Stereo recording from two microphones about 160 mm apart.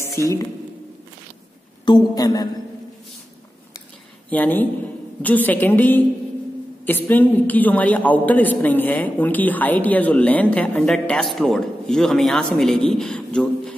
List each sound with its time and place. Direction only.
0.1 s a woman's voice: 20° left (ahead or behind)
1.9 s a man's voice: 25° left (ahead or behind)
4.3 s a man's voice: 10° left (ahead or behind)